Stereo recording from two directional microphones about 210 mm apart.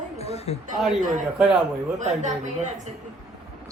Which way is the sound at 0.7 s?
Centre (ahead or behind).